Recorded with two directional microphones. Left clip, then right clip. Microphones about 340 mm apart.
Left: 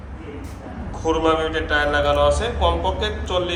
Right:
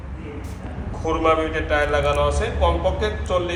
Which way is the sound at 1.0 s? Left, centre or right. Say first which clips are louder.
Even; centre.